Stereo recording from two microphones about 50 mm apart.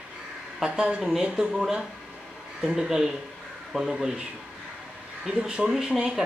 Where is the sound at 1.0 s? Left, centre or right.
Centre.